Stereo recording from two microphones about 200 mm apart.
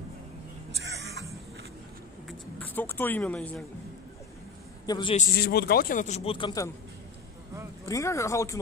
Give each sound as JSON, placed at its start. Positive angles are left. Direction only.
{"t": 2.2, "sound": "a sound", "side_deg": 10}
{"t": 4.8, "sound": "a man's voice", "side_deg": 20}
{"t": 5.1, "sound": "a man's voice", "side_deg": 50}
{"t": 7.9, "sound": "speech", "side_deg": 15}